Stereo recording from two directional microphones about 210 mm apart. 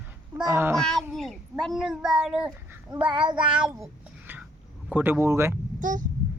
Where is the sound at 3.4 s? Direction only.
5° right (ahead or behind).